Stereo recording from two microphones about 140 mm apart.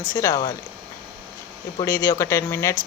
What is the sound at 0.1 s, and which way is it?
Speech, 20° left (ahead or behind).